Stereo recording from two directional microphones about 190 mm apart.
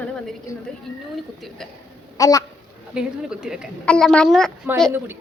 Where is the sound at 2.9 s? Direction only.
5° right (ahead or behind).